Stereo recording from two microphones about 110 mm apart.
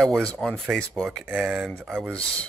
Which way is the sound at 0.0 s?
5° left (ahead or behind).